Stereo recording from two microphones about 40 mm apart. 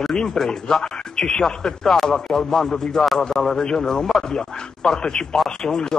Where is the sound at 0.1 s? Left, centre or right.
Centre.